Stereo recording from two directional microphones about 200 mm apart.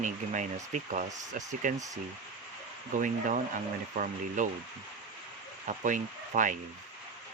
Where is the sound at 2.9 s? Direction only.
40° right (ahead or behind).